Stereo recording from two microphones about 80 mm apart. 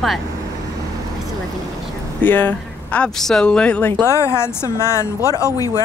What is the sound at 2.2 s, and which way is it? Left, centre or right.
Speech, left.